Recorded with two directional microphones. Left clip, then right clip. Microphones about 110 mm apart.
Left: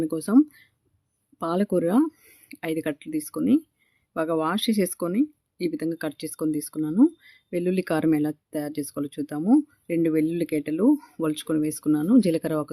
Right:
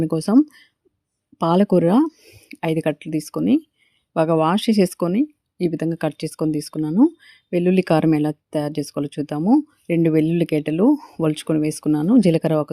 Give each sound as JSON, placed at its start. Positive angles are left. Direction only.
{"t": 0.0, "sound": "speech", "side_deg": -40}
{"t": 1.4, "sound": "speech", "side_deg": -45}
{"t": 2.0, "sound": "a sound", "side_deg": -20}
{"t": 2.5, "sound": "speech", "side_deg": -35}
{"t": 7.2, "sound": "speech", "side_deg": -35}
{"t": 9.4, "sound": "speech", "side_deg": -15}
{"t": 9.8, "sound": "speech", "side_deg": -35}
{"t": 10.8, "sound": "speech", "side_deg": -15}
{"t": 11.2, "sound": "speech", "side_deg": -30}